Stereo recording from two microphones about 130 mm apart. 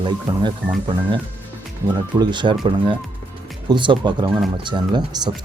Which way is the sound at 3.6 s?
40° right (ahead or behind).